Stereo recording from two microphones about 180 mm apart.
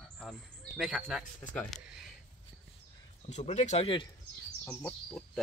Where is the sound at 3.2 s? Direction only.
40° left (ahead or behind).